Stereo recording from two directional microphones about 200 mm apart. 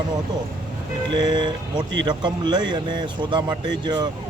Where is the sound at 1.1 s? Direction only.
20° right (ahead or behind).